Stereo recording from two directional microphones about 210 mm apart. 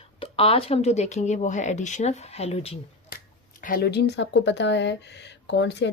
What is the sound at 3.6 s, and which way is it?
Speech, 45° left (ahead or behind).